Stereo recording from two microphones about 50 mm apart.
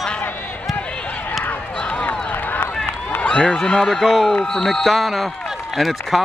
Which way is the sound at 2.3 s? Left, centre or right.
Left.